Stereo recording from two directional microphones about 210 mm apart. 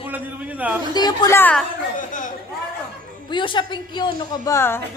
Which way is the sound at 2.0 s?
40° left (ahead or behind).